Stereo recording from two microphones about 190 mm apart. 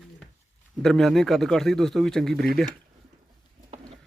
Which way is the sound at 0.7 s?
Centre (ahead or behind).